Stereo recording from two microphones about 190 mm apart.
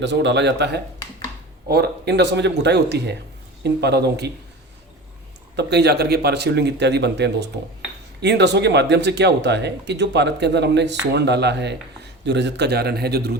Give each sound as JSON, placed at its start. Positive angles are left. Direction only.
{"t": 0.0, "sound": "a man's voice", "side_deg": -65}
{"t": 5.5, "sound": "speech", "side_deg": -60}